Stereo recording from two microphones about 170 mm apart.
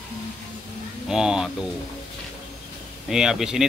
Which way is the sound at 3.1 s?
5° right (ahead or behind).